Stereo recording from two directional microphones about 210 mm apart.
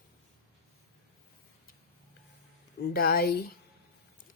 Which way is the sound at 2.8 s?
45° left (ahead or behind).